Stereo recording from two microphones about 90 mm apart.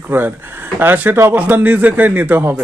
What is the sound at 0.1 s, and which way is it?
Speech, 20° right (ahead or behind).